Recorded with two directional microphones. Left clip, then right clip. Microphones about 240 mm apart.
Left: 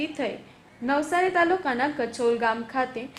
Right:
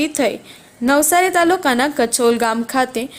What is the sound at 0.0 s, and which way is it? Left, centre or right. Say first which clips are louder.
A woman's voice: right 11 dB; right.